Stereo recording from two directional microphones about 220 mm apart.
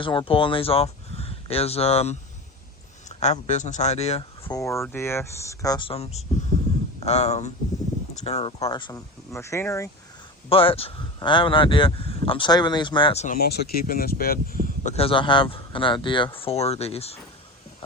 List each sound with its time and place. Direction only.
0.0 s speech: 20° left (ahead or behind)
4.4 s speech: 15° left (ahead or behind)
10.5 s speech: 25° left (ahead or behind)
13.2 s speech: 40° left (ahead or behind)
14.8 s speech: 25° left (ahead or behind)